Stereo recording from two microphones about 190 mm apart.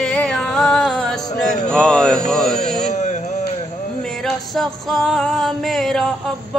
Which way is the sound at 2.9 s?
40° left (ahead or behind).